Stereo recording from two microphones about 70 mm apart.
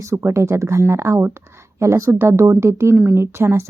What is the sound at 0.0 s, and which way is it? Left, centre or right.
A woman's voice, right.